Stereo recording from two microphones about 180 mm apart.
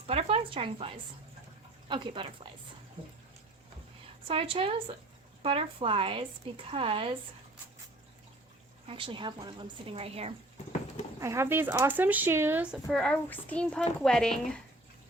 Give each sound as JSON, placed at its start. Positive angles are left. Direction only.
{"t": 0.1, "sound": "speech", "side_deg": -35}
{"t": 1.9, "sound": "a woman's voice", "side_deg": -25}
{"t": 4.3, "sound": "a woman's voice", "side_deg": -30}
{"t": 8.9, "sound": "a woman's voice", "side_deg": -30}
{"t": 11.2, "sound": "speech", "side_deg": -15}
{"t": 12.9, "sound": "speech", "side_deg": 5}